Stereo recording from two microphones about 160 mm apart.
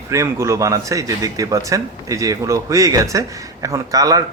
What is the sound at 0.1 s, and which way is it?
Speech, 20° right (ahead or behind).